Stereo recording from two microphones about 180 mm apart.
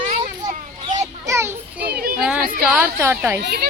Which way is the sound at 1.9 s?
55° right (ahead or behind).